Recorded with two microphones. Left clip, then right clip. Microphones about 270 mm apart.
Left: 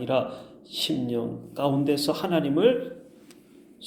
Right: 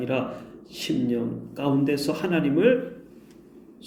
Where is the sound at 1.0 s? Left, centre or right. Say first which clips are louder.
Right 2 dB; centre.